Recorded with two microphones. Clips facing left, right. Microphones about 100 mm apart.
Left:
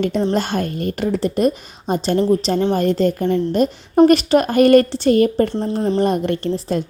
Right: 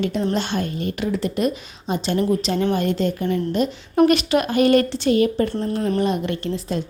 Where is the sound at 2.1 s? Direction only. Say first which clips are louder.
Left 4 dB; 30° left (ahead or behind); by 5.5 s 45° left (ahead or behind).